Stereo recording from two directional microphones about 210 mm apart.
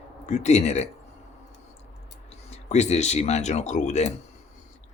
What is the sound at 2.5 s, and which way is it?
Speech, 30° left (ahead or behind).